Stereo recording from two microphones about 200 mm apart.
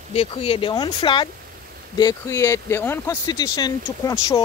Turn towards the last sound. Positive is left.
turn(degrees=15)  # may be behind; listen again after turning